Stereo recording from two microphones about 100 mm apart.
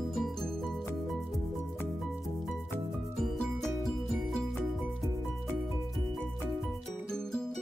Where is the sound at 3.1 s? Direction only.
5° left (ahead or behind).